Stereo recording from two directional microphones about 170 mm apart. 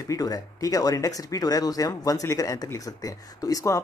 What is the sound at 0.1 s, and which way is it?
Speech, 20° left (ahead or behind).